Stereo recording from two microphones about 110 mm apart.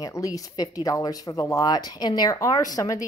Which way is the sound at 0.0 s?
30° left (ahead or behind).